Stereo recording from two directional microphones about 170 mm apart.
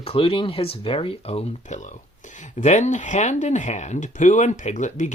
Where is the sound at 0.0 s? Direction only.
35° left (ahead or behind).